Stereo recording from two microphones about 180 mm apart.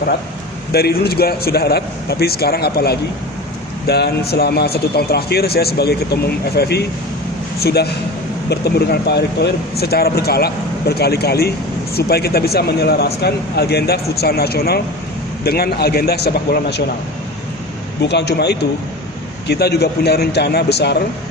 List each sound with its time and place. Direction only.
0.7 s speech: 60° left (ahead or behind)
18.0 s a man's voice: 70° left (ahead or behind)